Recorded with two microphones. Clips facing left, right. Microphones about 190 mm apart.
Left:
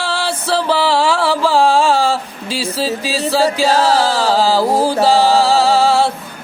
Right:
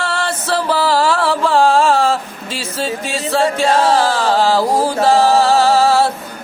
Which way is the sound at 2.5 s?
35° left (ahead or behind).